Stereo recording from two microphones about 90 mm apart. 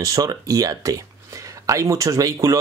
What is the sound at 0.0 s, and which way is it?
Speech, 35° right (ahead or behind).